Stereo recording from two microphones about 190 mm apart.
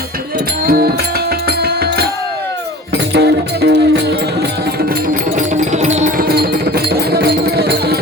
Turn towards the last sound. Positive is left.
turn(degrees=-55)  # may be behind; listen again after turning